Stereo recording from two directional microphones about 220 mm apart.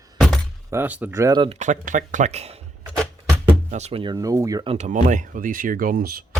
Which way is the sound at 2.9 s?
5° left (ahead or behind).